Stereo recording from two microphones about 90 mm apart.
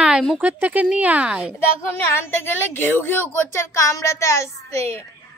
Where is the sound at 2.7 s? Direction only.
25° left (ahead or behind).